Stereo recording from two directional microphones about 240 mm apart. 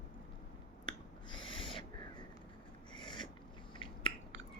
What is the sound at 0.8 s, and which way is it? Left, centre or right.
Owl, centre.